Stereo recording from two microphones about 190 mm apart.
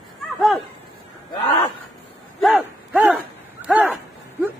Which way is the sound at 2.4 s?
Centre (ahead or behind).